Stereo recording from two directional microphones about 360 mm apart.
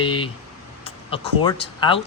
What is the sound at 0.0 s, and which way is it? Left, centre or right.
Speech, centre.